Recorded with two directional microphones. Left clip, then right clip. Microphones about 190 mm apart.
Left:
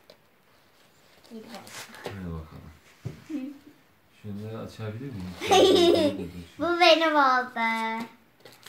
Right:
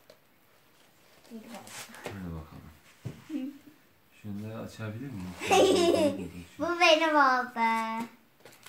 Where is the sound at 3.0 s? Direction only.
20° right (ahead or behind).